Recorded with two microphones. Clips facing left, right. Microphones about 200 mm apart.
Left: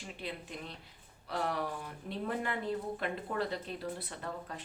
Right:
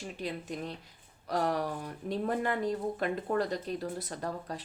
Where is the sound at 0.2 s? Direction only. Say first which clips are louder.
Right 6 dB; 40° right (ahead or behind).